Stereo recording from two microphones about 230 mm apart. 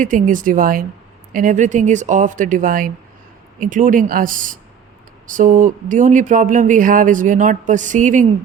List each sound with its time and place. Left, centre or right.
0.0 s speech: right